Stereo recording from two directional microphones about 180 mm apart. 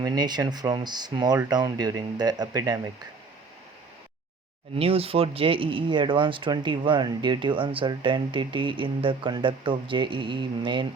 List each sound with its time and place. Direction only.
0.0 s speech: 25° right (ahead or behind)
4.8 s speech: 30° right (ahead or behind)